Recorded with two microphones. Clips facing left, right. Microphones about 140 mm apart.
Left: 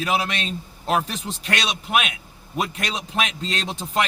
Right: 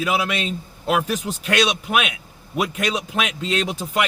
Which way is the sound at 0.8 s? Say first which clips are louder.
Right 2 dB; 35° left (ahead or behind).